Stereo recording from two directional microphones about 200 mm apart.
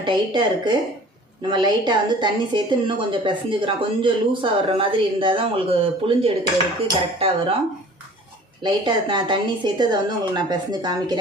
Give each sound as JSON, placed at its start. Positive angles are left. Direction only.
{"t": 0.0, "sound": "a woman's voice", "side_deg": -25}
{"t": 8.6, "sound": "a woman's voice", "side_deg": -25}